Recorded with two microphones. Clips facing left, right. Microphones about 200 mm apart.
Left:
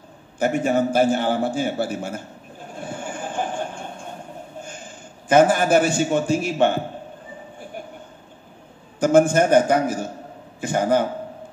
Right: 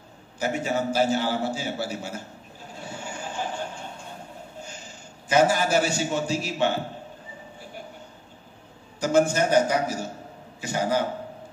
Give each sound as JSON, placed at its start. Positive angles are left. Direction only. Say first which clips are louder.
{"t": 0.4, "sound": "a man's voice", "louder": "left 6 dB", "side_deg": 55}
{"t": 2.7, "sound": "vehicle", "louder": "left 5 dB", "side_deg": 50}
{"t": 4.6, "sound": "a man's voice", "louder": "left 4 dB", "side_deg": 55}
{"t": 9.0, "sound": "a man's voice", "louder": "left 5 dB", "side_deg": 50}